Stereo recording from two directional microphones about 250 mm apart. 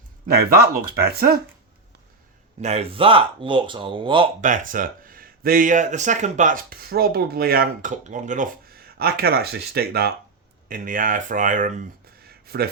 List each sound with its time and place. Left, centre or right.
0.3 s speech: right
2.6 s speech: right
12.3 s a sound: right